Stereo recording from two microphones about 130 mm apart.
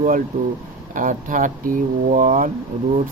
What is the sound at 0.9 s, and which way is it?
Speech, 90° right.